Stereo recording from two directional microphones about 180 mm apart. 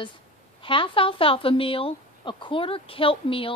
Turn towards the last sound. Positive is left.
turn(degrees=30)  # may be behind; listen again after turning